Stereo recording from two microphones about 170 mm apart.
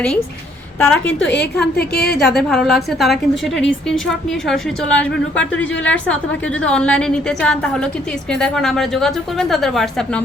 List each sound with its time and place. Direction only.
0.8 s a woman's voice: 10° left (ahead or behind)
1.7 s a woman's voice: 70° left (ahead or behind)
2.3 s a woman's voice: centre (ahead or behind)